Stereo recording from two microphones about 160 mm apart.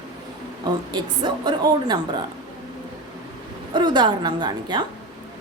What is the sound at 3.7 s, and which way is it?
A woman's voice, 30° right (ahead or behind).